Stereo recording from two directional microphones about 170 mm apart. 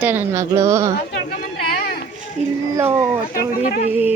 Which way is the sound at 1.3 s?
65° left (ahead or behind).